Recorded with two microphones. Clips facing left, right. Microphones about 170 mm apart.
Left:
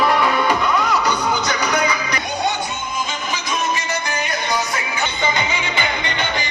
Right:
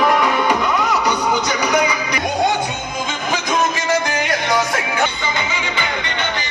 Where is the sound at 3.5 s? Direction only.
90° right.